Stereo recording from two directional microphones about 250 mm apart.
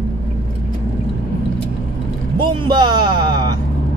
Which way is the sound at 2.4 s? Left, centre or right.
Centre.